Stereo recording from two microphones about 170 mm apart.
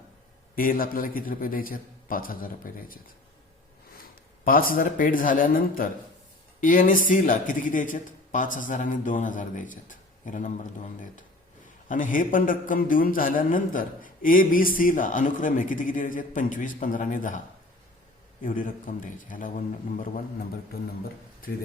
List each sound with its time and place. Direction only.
0.5 s a man's voice: 55° left (ahead or behind)
4.4 s a man's voice: 55° left (ahead or behind)
11.9 s a man's voice: 50° left (ahead or behind)
18.4 s a man's voice: 50° left (ahead or behind)
20.7 s a man's voice: 65° left (ahead or behind)